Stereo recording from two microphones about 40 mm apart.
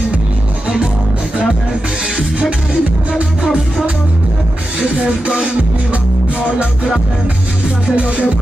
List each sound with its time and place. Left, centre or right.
2.8 s music: right
4.7 s music: right
7.8 s music: right